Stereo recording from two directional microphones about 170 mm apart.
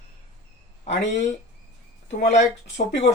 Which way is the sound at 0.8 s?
45° left (ahead or behind).